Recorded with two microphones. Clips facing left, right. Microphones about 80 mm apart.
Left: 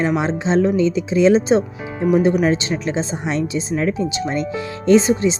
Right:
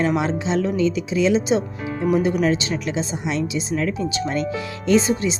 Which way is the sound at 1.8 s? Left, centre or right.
Left.